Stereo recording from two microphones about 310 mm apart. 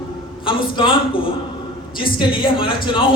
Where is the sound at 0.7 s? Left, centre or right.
Centre.